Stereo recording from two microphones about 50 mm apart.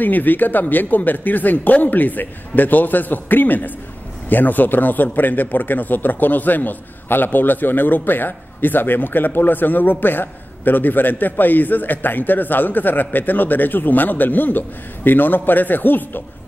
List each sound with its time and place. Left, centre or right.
0.0 s a man's voice: left